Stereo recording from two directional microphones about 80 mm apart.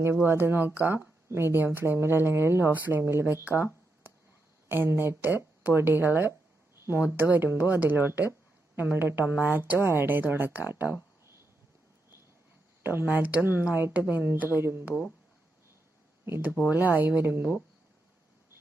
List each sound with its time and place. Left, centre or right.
0.0 s speech: right
4.7 s speech: right
12.8 s speech: right
16.6 s speech: right